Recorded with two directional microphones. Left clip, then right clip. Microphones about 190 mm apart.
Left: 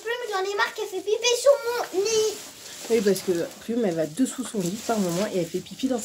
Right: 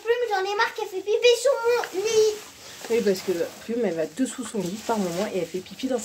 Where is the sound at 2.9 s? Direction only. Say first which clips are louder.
Left 1 dB; 5° left (ahead or behind).